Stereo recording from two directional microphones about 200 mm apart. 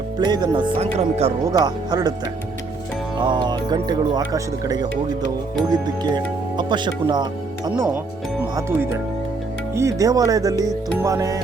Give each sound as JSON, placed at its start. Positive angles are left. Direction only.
{"t": 0.2, "sound": "speech", "side_deg": -20}
{"t": 1.5, "sound": "speech", "side_deg": -20}
{"t": 3.2, "sound": "speech", "side_deg": -20}
{"t": 7.7, "sound": "speech", "side_deg": -5}